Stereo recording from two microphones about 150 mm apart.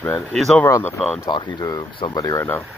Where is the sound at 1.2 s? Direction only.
30° left (ahead or behind).